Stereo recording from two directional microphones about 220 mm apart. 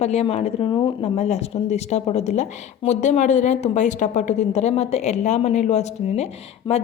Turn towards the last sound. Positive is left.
turn(degrees=30)  # may be behind; listen again after turning